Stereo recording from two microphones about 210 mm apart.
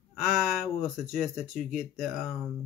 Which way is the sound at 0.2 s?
5° right (ahead or behind).